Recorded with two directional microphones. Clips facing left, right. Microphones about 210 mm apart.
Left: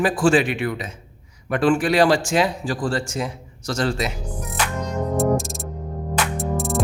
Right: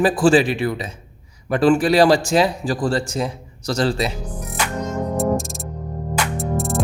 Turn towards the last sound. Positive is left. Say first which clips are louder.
# right 1 dB
turn(degrees=0)  # may be behind; listen again after turning